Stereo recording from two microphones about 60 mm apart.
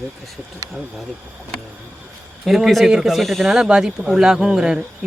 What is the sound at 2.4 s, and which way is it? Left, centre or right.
Speech, centre.